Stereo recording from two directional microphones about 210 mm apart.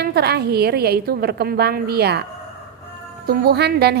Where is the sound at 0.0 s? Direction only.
50° right (ahead or behind).